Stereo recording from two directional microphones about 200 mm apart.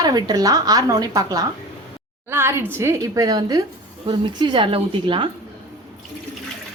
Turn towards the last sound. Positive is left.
turn(degrees=-25)  # may be behind; listen again after turning